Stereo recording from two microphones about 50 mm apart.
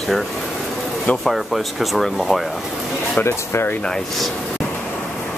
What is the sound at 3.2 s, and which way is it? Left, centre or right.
Speech, left.